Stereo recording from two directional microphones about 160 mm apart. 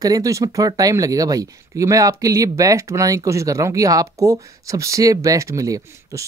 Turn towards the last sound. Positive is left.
turn(degrees=-20)  # may be behind; listen again after turning